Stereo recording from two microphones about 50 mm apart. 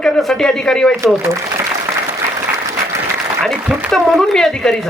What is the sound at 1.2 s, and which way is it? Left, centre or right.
Applause, right.